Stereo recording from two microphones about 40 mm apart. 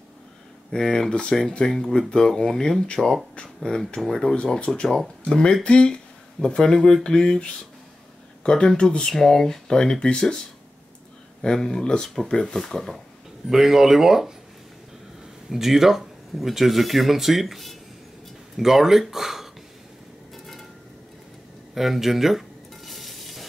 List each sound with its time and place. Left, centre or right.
0.7 s speech: centre
3.0 s speech: centre
3.7 s speech: left
4.2 s speech: centre
4.6 s speech: left
11.4 s speech: centre
12.5 s speech: centre
13.5 s speech: centre
15.5 s speech: centre
21.7 s speech: centre
22.8 s stir: centre